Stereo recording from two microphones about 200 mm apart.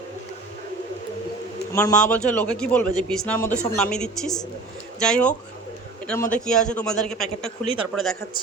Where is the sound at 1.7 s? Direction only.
10° left (ahead or behind).